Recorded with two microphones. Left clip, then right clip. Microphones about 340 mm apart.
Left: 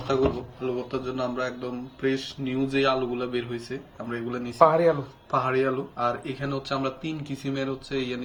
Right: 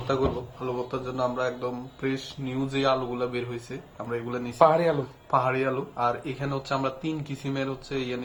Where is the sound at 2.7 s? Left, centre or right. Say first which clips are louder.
Left 1 dB; centre.